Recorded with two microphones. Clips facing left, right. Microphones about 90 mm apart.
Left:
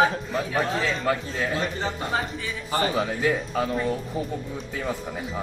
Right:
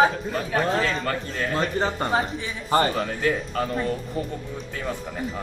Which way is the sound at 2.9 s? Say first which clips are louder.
Left 1 dB; 5° left (ahead or behind).